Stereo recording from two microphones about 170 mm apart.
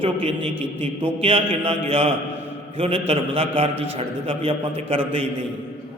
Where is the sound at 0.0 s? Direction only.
35° right (ahead or behind).